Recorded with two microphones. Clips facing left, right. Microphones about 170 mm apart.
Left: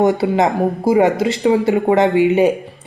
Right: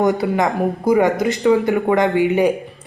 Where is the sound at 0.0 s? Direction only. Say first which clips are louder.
Left 3 dB; 25° left (ahead or behind).